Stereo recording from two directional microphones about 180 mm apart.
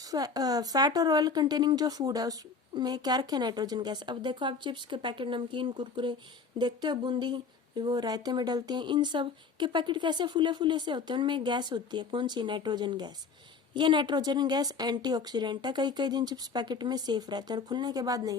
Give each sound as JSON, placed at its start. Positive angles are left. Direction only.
{"t": 0.0, "sound": "speech", "side_deg": -20}